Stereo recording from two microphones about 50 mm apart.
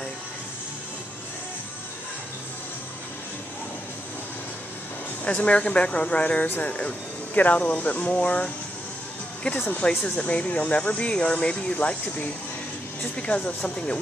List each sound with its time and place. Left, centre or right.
5.2 s speech: left
9.8 s speech: left